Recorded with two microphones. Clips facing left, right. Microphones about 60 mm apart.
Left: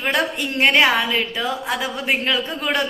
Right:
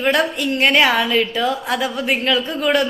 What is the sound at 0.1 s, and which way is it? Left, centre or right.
A woman's voice, centre.